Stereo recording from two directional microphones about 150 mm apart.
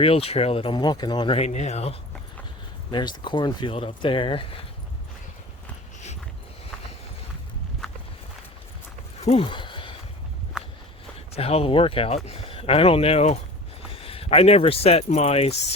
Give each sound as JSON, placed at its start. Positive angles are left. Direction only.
{"t": 0.0, "sound": "speech", "side_deg": 40}
{"t": 1.4, "sound": "speech", "side_deg": 50}
{"t": 2.9, "sound": "speech", "side_deg": 30}
{"t": 9.2, "sound": "a sound", "side_deg": 40}
{"t": 10.5, "sound": "walk", "side_deg": -5}
{"t": 11.3, "sound": "speech", "side_deg": 40}